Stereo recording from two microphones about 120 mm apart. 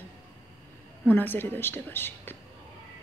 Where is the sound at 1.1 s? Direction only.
15° left (ahead or behind).